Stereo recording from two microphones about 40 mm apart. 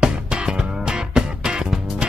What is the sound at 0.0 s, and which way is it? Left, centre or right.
Music, centre.